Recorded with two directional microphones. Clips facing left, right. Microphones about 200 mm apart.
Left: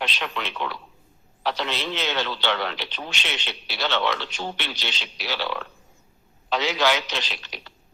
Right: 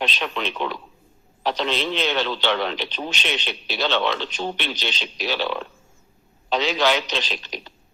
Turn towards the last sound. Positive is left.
turn(degrees=-20)  # may be behind; listen again after turning